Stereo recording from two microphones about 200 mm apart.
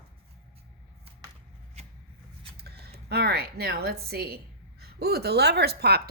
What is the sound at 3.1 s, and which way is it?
A woman's voice, 55° right (ahead or behind).